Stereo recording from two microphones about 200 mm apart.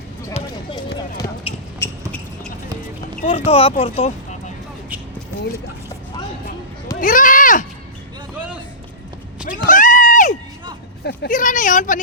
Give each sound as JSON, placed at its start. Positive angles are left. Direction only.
{"t": 0.3, "sound": "run", "side_deg": 25}
{"t": 1.8, "sound": "a sound", "side_deg": 5}
{"t": 3.2, "sound": "speech", "side_deg": 30}
{"t": 7.0, "sound": "speech", "side_deg": 40}
{"t": 9.6, "sound": "a sound", "side_deg": 40}
{"t": 11.3, "sound": "speech", "side_deg": 40}